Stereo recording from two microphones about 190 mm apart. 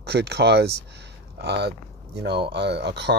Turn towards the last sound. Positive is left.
turn(degrees=-65)  # may be behind; listen again after turning